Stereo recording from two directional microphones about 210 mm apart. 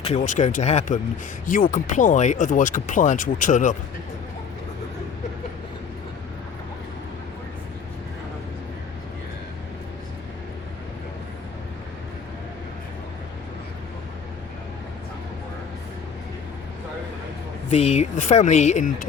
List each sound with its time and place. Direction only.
0.0 s speech: 35° left (ahead or behind)
17.7 s speech: 30° left (ahead or behind)